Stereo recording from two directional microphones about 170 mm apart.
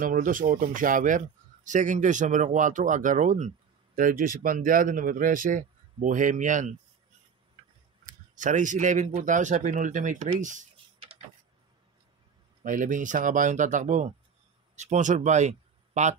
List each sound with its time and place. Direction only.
0.0 s speech: 50° right (ahead or behind)
8.0 s speech: 50° right (ahead or behind)
12.6 s speech: 50° right (ahead or behind)